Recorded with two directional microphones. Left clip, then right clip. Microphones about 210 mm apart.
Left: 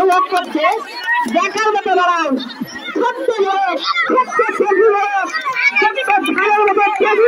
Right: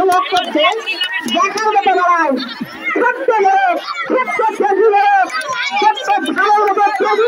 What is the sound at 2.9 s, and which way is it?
Children playing, 50° left (ahead or behind).